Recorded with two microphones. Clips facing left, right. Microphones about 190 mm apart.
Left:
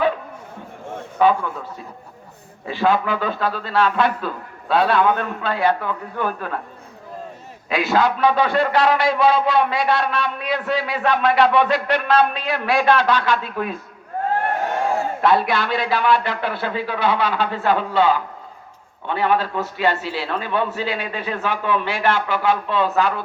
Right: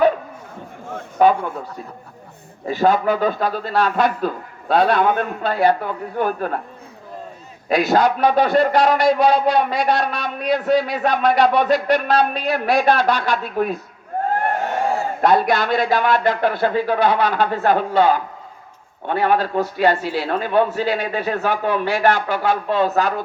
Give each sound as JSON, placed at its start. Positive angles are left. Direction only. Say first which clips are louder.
{"t": 1.2, "sound": "a man's voice", "louder": "right 2 dB", "side_deg": -45}
{"t": 2.6, "sound": "a man's voice", "louder": "right 3 dB", "side_deg": -45}
{"t": 7.7, "sound": "a man's voice", "louder": "right 3 dB", "side_deg": -40}
{"t": 15.2, "sound": "a man's voice", "louder": "right 3 dB", "side_deg": -45}